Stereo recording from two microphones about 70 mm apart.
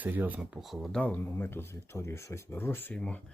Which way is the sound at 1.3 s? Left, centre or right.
Left.